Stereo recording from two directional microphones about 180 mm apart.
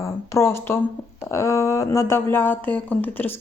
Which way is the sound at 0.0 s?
15° left (ahead or behind).